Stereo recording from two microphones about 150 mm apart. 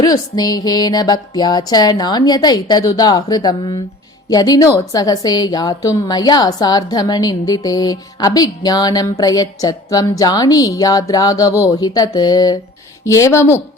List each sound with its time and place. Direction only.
0.0 s a woman's voice: 25° left (ahead or behind)